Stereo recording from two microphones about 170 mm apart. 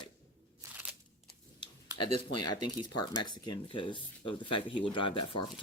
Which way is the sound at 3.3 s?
25° left (ahead or behind).